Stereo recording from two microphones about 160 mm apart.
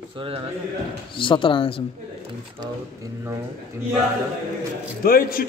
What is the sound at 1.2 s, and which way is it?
Speech, 35° left (ahead or behind).